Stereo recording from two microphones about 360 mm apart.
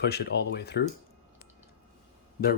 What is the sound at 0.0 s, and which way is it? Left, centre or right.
Speech, left.